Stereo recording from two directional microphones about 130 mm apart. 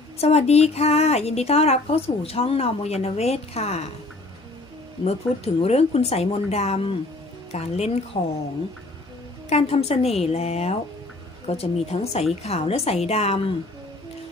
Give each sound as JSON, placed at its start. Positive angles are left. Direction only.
{"t": 0.2, "sound": "a woman's voice", "side_deg": 55}
{"t": 5.0, "sound": "a woman's voice", "side_deg": 50}
{"t": 9.5, "sound": "speech", "side_deg": 50}